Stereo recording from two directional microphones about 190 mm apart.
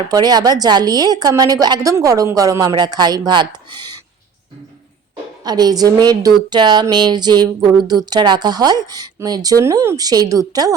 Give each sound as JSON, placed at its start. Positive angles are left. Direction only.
{"t": 0.1, "sound": "a woman's voice", "side_deg": -20}
{"t": 5.5, "sound": "a woman's voice", "side_deg": -20}